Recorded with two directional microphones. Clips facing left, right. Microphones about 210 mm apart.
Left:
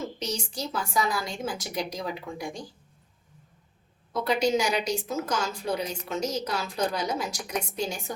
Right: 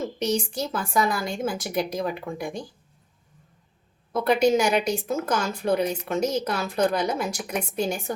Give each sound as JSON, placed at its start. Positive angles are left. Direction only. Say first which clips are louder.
{"t": 0.2, "sound": "a woman's voice", "louder": "right 7 dB", "side_deg": -55}
{"t": 4.1, "sound": "speech", "louder": "right 5 dB", "side_deg": -55}